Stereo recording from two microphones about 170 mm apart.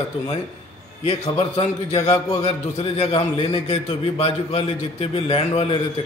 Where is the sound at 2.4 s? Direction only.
35° left (ahead or behind).